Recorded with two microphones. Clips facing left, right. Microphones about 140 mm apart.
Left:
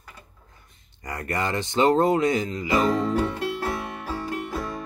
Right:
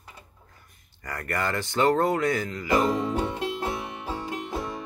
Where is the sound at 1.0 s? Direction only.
20° left (ahead or behind).